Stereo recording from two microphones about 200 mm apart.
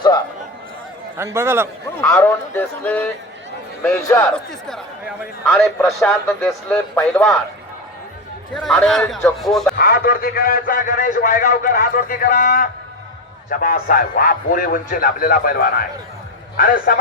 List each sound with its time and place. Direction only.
1.2 s a man's voice: 15° right (ahead or behind)
2.0 s speech: 10° left (ahead or behind)
5.5 s a man's voice: centre (ahead or behind)
8.5 s a man's voice: 5° left (ahead or behind)
9.7 s a man's voice: 50° left (ahead or behind)